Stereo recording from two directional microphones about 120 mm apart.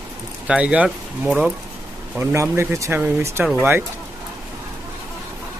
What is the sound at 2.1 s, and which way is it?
Speech, 20° right (ahead or behind).